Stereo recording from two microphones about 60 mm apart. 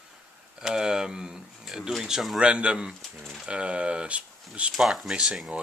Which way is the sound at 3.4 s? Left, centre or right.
Centre.